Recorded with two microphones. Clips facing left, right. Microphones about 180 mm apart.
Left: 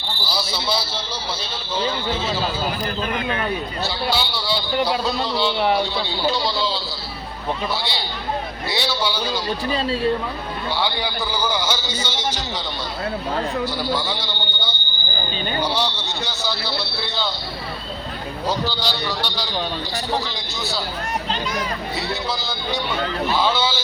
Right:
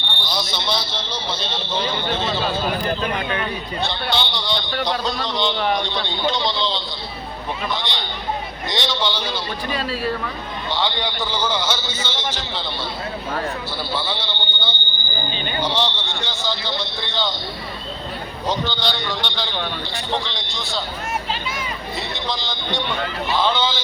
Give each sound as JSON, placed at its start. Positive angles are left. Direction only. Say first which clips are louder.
{"t": 0.0, "sound": "a man's voice", "louder": "even", "side_deg": 5}
{"t": 3.8, "sound": "a man's voice", "louder": "even", "side_deg": 5}
{"t": 9.6, "sound": "speech", "louder": "left 3 dB", "side_deg": 30}
{"t": 10.7, "sound": "a man's voice", "louder": "right 1 dB", "side_deg": 10}
{"t": 13.8, "sound": "a man's voice", "louder": "left 2 dB", "side_deg": 10}
{"t": 15.9, "sound": "a man's voice", "louder": "even", "side_deg": 40}
{"t": 18.7, "sound": "a man's voice", "louder": "even", "side_deg": 10}